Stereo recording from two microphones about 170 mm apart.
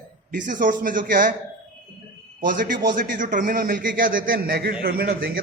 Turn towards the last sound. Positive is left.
turn(degrees=-65)  # may be behind; listen again after turning